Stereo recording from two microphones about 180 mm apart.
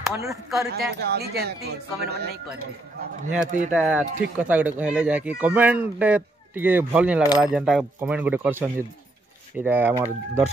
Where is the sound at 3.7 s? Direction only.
5° right (ahead or behind).